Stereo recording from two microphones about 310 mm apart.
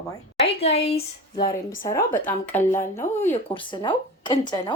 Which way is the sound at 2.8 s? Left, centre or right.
Left.